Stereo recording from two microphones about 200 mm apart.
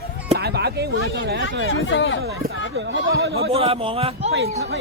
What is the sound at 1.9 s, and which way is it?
Speech, 70° left (ahead or behind).